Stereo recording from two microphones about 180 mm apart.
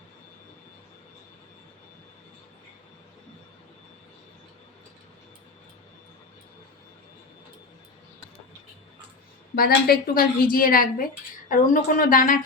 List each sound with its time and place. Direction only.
9.6 s a woman's voice: 55° left (ahead or behind)